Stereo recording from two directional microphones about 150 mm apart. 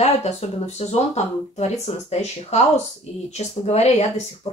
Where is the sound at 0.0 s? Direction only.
45° left (ahead or behind).